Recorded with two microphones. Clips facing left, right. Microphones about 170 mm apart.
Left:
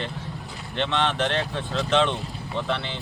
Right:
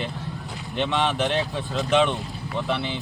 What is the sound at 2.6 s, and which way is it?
Speech, 15° right (ahead or behind).